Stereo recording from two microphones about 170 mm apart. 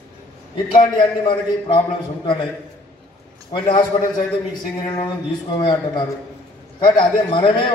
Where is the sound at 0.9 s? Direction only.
30° left (ahead or behind).